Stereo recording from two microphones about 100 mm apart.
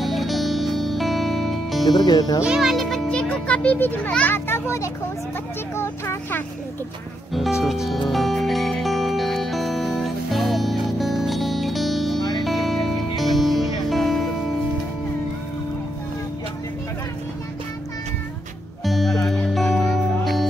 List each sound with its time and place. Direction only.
0.0 s music: centre (ahead or behind)
1.9 s speech: 40° left (ahead or behind)
2.4 s music: 5° right (ahead or behind); by 4.9 s 30° left (ahead or behind)
5.8 s vehicle: 20° left (ahead or behind)
7.6 s music: centre (ahead or behind)
12.2 s music: 45° left (ahead or behind)
12.4 s music: centre (ahead or behind)
18.9 s music: centre (ahead or behind)